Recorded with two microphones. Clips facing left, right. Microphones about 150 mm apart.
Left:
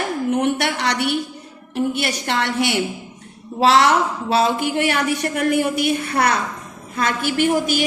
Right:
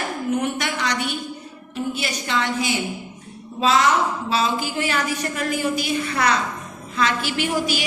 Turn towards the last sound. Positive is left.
turn(degrees=50)  # may be behind; listen again after turning